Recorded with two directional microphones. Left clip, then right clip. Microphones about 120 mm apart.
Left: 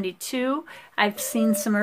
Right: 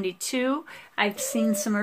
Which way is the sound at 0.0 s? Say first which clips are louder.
Even; 30° left (ahead or behind).